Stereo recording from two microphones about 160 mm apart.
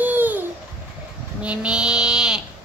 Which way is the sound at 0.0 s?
10° right (ahead or behind).